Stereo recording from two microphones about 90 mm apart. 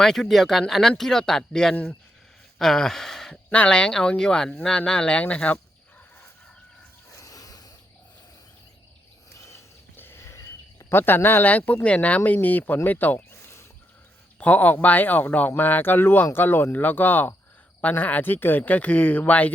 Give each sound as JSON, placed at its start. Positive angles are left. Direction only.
{"t": 0.0, "sound": "speech", "side_deg": 5}
{"t": 2.6, "sound": "gasp", "side_deg": 5}
{"t": 3.5, "sound": "speech", "side_deg": 15}
{"t": 7.2, "sound": "a sound", "side_deg": 40}
{"t": 9.4, "sound": "a sound", "side_deg": 35}
{"t": 10.9, "sound": "speech", "side_deg": 25}